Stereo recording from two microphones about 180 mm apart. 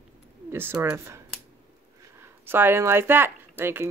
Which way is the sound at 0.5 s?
15° right (ahead or behind).